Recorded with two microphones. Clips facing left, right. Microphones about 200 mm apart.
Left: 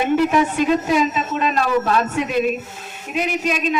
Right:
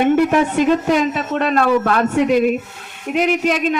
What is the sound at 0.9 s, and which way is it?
A man's voice, 60° right (ahead or behind).